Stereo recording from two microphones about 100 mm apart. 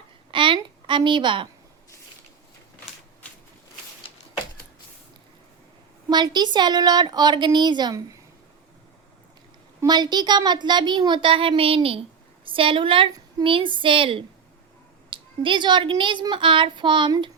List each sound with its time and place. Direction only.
0.3 s a sound: 55° right (ahead or behind)
6.1 s speech: 45° right (ahead or behind)
9.8 s a woman's voice: 45° right (ahead or behind)